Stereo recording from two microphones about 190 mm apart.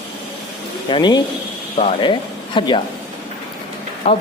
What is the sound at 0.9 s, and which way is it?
Speech, 25° left (ahead or behind).